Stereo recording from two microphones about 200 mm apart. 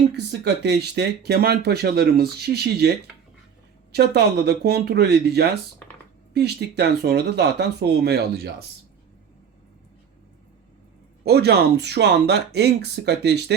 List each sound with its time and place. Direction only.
0.1 s speech: 60° right (ahead or behind)
11.3 s speech: 55° right (ahead or behind)